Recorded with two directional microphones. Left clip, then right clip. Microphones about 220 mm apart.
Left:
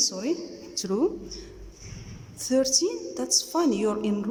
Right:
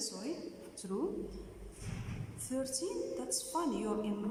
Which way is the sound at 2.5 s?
50° left (ahead or behind).